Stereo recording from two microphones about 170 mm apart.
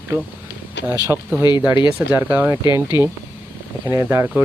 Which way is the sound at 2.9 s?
25° left (ahead or behind).